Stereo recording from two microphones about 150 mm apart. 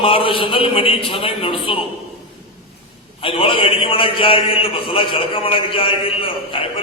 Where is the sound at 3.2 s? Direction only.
35° left (ahead or behind).